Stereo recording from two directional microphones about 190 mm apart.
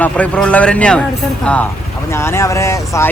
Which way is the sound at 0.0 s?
5° left (ahead or behind).